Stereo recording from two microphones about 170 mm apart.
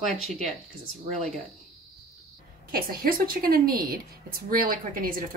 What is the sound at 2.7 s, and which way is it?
A woman's voice, 55° right (ahead or behind).